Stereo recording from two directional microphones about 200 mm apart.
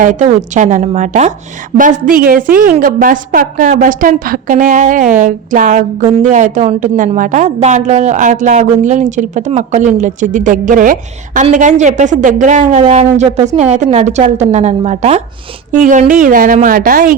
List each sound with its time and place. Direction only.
0.0 s a woman's voice: 40° right (ahead or behind)